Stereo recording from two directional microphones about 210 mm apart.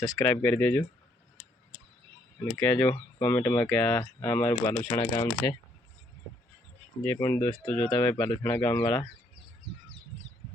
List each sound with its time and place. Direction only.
0.0 s speech: 5° left (ahead or behind)
2.6 s speech: 5° left (ahead or behind)
7.0 s speech: 10° left (ahead or behind)